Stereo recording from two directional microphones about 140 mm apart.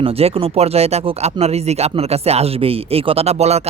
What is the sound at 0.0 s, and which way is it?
Speech, 45° right (ahead or behind).